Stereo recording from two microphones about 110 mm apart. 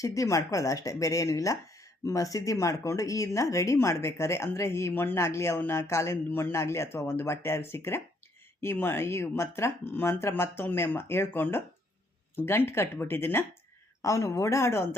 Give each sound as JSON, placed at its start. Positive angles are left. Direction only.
{"t": 0.0, "sound": "speech", "side_deg": 30}